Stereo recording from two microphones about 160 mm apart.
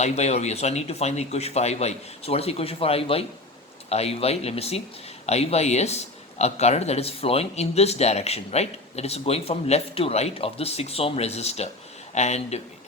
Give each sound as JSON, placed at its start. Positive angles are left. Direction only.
{"t": 0.0, "sound": "speech", "side_deg": 45}